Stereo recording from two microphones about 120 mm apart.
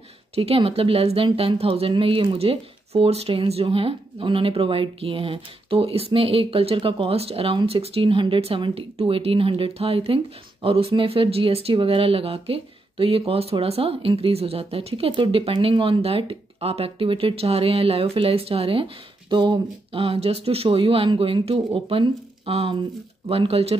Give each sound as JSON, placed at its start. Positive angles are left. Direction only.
{"t": 0.4, "sound": "a woman's voice", "side_deg": -55}